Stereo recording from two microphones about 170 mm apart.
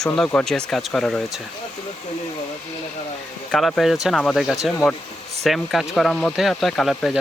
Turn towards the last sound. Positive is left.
turn(degrees=0)  # may be behind; listen again after turning